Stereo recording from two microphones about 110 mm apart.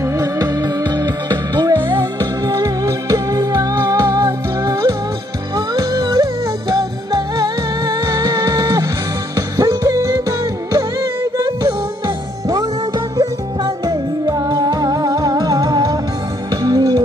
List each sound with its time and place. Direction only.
0.2 s music: 35° right (ahead or behind)
11.3 s music: 30° right (ahead or behind)
13.8 s music: 40° right (ahead or behind)